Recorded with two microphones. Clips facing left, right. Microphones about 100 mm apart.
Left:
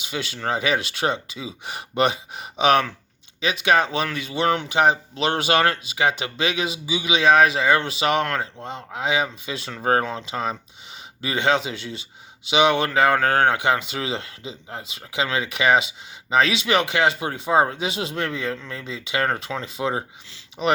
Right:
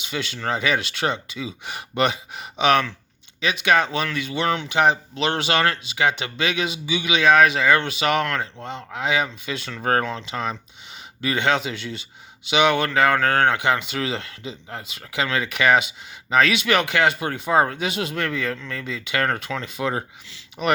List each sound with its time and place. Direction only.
0.0 s speech: 40° left (ahead or behind)
9.8 s speech: 25° left (ahead or behind)
10.1 s speech: 40° left (ahead or behind)